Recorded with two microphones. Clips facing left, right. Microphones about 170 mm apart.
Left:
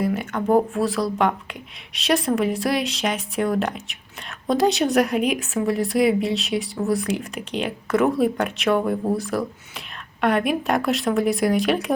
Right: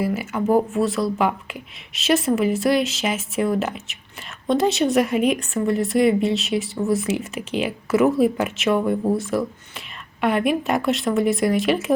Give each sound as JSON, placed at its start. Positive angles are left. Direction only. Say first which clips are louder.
{"t": 0.0, "sound": "speech", "louder": "right 1 dB", "side_deg": -5}